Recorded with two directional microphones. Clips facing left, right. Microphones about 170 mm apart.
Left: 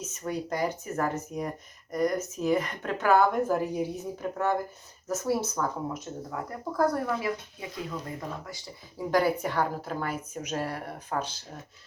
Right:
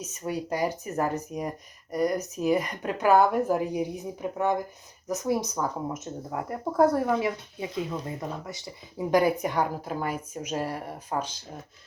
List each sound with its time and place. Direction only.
0.2 s speech: 10° right (ahead or behind)
6.3 s speech: 25° right (ahead or behind)